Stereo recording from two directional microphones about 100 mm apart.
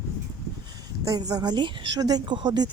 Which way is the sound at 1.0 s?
35° right (ahead or behind).